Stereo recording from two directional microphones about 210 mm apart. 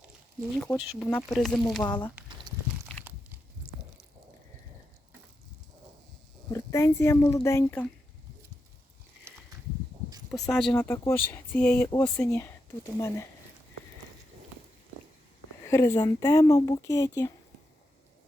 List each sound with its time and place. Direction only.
0.5 s speech: centre (ahead or behind)
1.8 s speech: 20° left (ahead or behind)
2.5 s a sound: 20° right (ahead or behind)
3.0 s crunch: 10° right (ahead or behind)
6.5 s speech: 15° left (ahead or behind)
10.5 s speech: 5° left (ahead or behind)
15.6 s speech: 15° left (ahead or behind)